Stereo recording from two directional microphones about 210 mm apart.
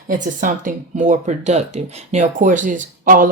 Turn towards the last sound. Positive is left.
turn(degrees=-40)  # may be behind; listen again after turning